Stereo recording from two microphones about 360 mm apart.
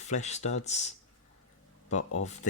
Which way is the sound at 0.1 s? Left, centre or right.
Centre.